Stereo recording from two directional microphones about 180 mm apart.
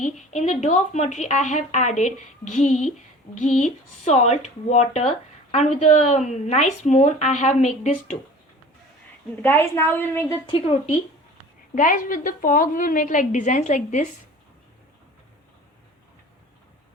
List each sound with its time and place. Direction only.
0.0 s a woman's voice: 40° left (ahead or behind)
9.3 s a woman's voice: 10° left (ahead or behind)
10.4 s a woman's voice: 30° left (ahead or behind)
11.7 s a woman's voice: 45° left (ahead or behind)